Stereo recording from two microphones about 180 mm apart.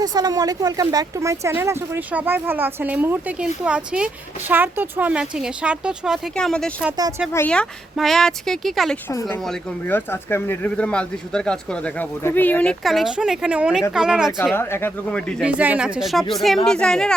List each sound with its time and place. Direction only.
0.0 s a woman's voice: 20° right (ahead or behind); by 9.0 s centre (ahead or behind)
9.9 s speech: 10° left (ahead or behind); by 14.3 s 5° right (ahead or behind)
14.5 s speech: 10° left (ahead or behind)
15.4 s speech: 5° right (ahead or behind)